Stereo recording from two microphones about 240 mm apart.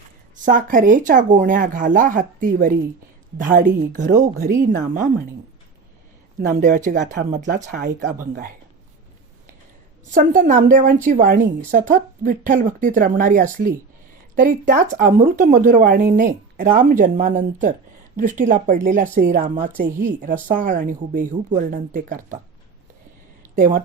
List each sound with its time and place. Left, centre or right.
0.4 s a woman's voice: right
6.5 s a woman's voice: right
10.1 s a woman's voice: right
23.4 s a sound: right